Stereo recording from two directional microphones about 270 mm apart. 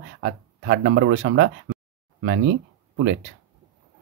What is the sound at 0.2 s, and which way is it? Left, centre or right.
Speech, right.